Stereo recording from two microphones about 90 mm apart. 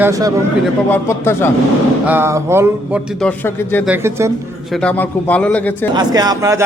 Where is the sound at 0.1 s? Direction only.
40° right (ahead or behind).